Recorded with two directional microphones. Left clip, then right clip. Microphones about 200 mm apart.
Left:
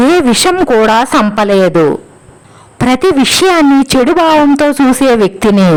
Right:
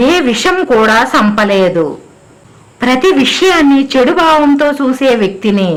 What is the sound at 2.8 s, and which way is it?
A woman's voice, 45° left (ahead or behind).